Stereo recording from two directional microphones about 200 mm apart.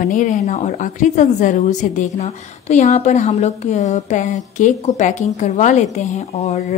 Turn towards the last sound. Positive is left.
turn(degrees=35)  # may be behind; listen again after turning